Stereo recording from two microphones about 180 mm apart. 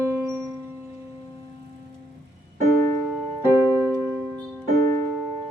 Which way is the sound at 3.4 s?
15° right (ahead or behind).